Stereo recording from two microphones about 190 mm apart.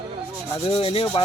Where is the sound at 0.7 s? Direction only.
30° left (ahead or behind).